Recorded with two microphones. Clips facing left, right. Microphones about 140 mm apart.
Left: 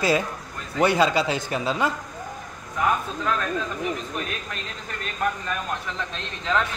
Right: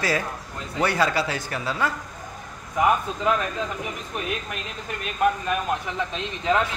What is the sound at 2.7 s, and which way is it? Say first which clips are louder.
Speech: right 3 dB; 15° right (ahead or behind).